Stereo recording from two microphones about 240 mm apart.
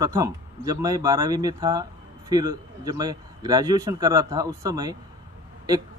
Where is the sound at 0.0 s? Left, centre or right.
Centre.